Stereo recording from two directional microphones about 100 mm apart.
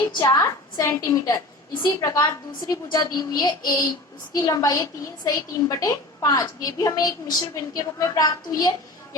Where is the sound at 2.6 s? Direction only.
45° left (ahead or behind).